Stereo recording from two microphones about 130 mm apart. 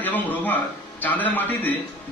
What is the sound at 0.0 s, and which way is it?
Music, 15° left (ahead or behind).